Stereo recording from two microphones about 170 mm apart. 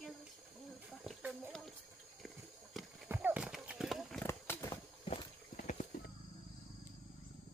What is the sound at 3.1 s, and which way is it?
Horse, 10° right (ahead or behind).